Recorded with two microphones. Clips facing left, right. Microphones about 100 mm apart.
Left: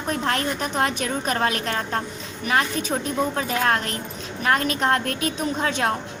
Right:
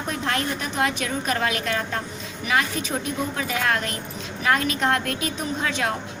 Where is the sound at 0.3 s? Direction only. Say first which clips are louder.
Even; 40° left (ahead or behind).